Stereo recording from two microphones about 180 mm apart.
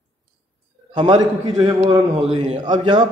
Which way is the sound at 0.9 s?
25° right (ahead or behind).